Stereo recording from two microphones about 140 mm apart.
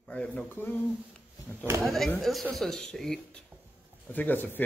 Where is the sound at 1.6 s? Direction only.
15° right (ahead or behind).